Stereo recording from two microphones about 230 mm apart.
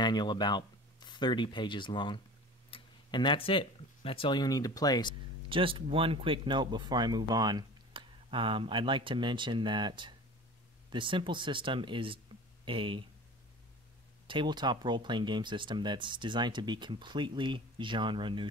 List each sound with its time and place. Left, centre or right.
0.0 s speech: centre
5.5 s speech: right
14.2 s speech: right